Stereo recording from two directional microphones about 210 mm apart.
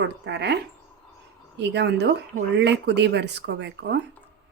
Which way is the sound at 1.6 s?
55° right (ahead or behind).